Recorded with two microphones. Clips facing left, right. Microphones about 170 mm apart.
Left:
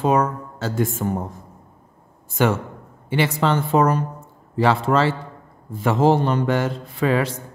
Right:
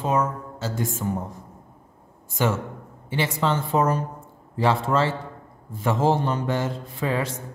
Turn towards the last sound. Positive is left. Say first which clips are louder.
# left 5 dB
turn(degrees=75)  # may be behind; listen again after turning